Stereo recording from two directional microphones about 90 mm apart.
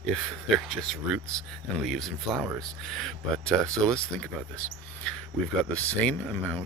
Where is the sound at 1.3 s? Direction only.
10° left (ahead or behind).